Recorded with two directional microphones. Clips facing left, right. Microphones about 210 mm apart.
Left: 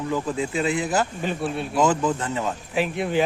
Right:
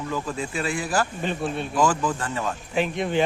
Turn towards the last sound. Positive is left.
turn(degrees=5)  # may be behind; listen again after turning